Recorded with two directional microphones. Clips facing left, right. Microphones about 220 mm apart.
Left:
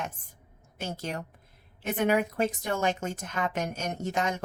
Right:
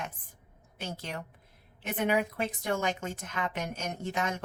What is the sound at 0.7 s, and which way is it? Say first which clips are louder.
A woman's voice: left 4 dB; 45° left (ahead or behind).